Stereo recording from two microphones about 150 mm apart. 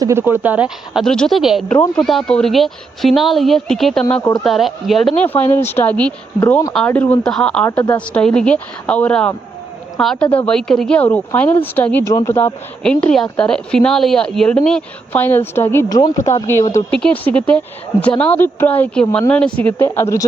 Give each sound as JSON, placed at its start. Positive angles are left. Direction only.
{"t": 0.0, "sound": "speech", "side_deg": -15}
{"t": 1.0, "sound": "speech", "side_deg": 5}
{"t": 5.2, "sound": "speech", "side_deg": 10}
{"t": 6.7, "sound": "speech", "side_deg": 10}
{"t": 12.8, "sound": "speech", "side_deg": 5}
{"t": 16.0, "sound": "speech", "side_deg": 30}
{"t": 16.9, "sound": "speech", "side_deg": 10}